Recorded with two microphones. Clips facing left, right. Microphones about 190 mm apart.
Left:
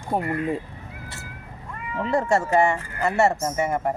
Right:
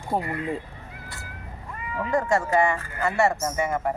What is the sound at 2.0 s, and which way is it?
Speech, 25° left (ahead or behind).